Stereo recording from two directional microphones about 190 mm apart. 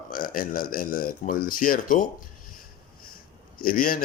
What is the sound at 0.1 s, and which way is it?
Speech, 50° left (ahead or behind).